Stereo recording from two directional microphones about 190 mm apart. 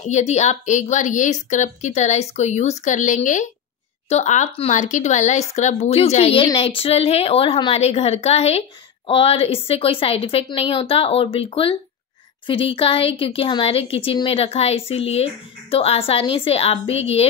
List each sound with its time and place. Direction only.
0.0 s a woman's voice: 35° left (ahead or behind)